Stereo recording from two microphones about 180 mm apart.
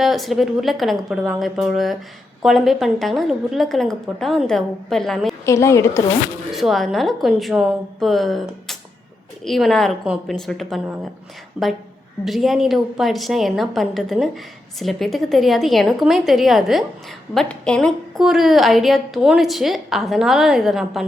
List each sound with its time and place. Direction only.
0.0 s a woman's voice: centre (ahead or behind)
5.5 s a woman's voice: 15° left (ahead or behind)
6.5 s a woman's voice: centre (ahead or behind)